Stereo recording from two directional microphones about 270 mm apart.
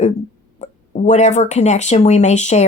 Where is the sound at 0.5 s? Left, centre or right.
Left.